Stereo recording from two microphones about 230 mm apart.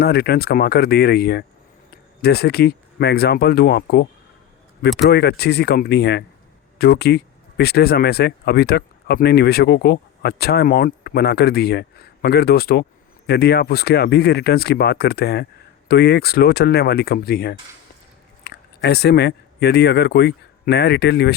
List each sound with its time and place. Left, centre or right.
0.0 s speech: left